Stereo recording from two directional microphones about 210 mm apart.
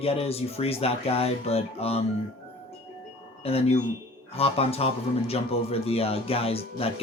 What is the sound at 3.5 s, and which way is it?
Speech, 30° left (ahead or behind).